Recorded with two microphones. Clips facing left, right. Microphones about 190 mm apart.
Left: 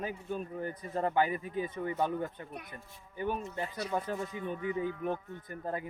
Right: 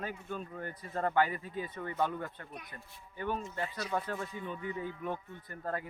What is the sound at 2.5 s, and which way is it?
Speech, 50° left (ahead or behind).